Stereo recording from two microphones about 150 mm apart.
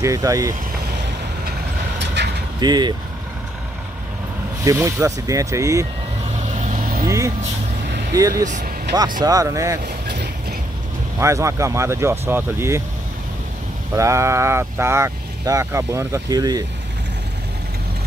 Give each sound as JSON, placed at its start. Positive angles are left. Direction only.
{"t": 0.0, "sound": "speech", "side_deg": -20}
{"t": 2.6, "sound": "speech", "side_deg": -30}
{"t": 4.6, "sound": "speech", "side_deg": -20}
{"t": 6.4, "sound": "vehicle", "side_deg": -50}
{"t": 7.1, "sound": "speech", "side_deg": -20}
{"t": 10.0, "sound": "a sound", "side_deg": -90}
{"t": 11.1, "sound": "speech", "side_deg": -20}
{"t": 13.9, "sound": "speech", "side_deg": -20}